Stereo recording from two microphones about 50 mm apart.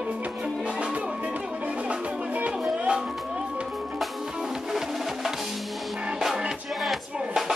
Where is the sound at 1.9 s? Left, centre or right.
Right.